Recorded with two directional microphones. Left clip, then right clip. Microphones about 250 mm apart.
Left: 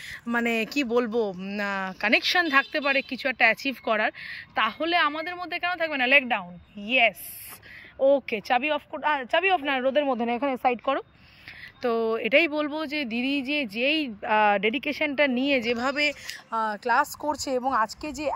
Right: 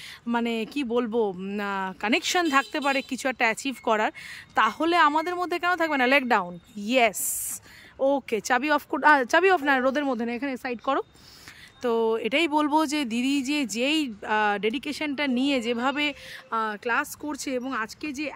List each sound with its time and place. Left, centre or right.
0.3 s speech: centre
11.8 s speech: centre
16.4 s speech: right
18.0 s a woman's voice: centre